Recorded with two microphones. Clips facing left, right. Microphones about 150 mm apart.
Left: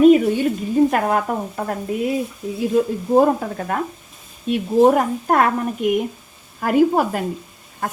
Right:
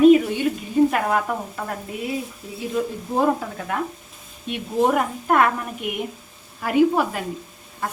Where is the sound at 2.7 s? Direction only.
45° left (ahead or behind).